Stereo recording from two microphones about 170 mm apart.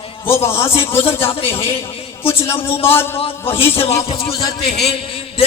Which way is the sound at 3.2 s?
35° left (ahead or behind).